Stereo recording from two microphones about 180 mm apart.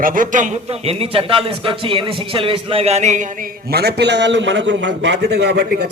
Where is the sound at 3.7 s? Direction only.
65° right (ahead or behind).